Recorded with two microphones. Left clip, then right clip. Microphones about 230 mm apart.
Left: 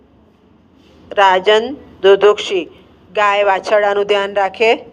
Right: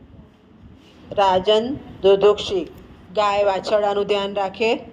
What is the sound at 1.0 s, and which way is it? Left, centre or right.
A man's voice, left.